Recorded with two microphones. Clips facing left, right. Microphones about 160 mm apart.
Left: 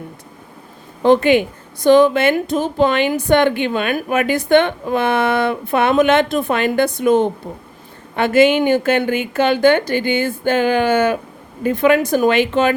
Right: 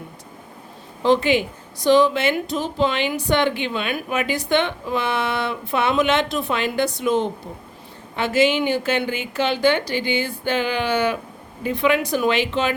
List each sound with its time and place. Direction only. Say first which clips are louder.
1.0 s a woman's voice: left 5 dB; 55° left (ahead or behind)